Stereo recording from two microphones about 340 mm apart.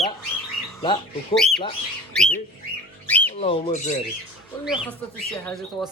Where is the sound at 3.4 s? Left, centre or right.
Centre.